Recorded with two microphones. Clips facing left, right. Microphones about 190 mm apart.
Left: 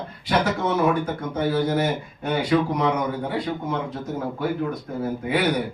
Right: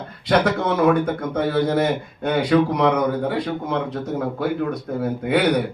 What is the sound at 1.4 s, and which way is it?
A man's voice, 70° right (ahead or behind).